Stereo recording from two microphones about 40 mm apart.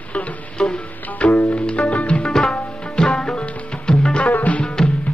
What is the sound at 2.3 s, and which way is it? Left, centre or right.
Tabla, centre.